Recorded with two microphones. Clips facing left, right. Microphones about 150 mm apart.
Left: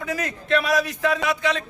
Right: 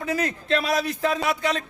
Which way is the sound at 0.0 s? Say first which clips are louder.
Right 2 dB; 30° right (ahead or behind).